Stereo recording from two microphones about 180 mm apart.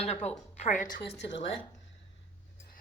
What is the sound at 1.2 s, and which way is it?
Speech, 85° left.